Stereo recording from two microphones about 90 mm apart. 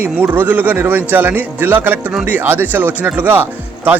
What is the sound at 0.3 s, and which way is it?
Speech, 20° right (ahead or behind).